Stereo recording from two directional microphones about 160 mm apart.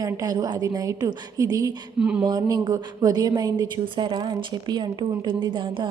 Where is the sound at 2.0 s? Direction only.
5° right (ahead or behind).